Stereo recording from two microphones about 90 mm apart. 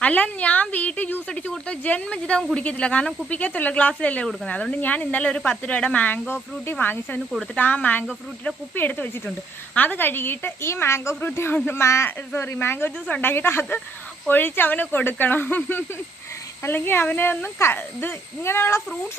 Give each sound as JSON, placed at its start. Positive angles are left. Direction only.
{"t": 0.0, "sound": "speech", "side_deg": 15}